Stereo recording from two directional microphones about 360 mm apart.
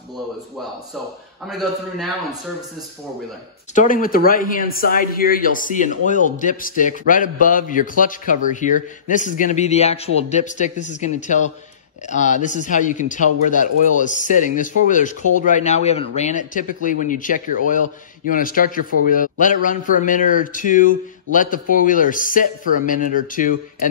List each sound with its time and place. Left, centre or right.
1.5 s a man's voice: centre
3.7 s a man's voice: left